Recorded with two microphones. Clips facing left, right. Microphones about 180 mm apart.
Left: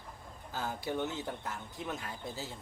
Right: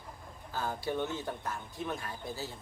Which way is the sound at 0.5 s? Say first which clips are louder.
Right 2 dB; 15° left (ahead or behind).